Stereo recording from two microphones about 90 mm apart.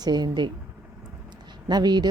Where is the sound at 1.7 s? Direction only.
50° right (ahead or behind).